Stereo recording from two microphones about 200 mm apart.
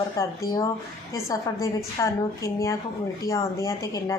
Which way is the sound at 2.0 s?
15° left (ahead or behind).